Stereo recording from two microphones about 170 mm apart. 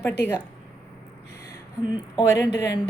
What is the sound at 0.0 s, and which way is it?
Speech, 15° left (ahead or behind).